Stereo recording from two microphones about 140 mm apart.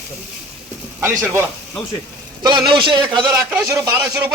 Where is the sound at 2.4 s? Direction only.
35° right (ahead or behind).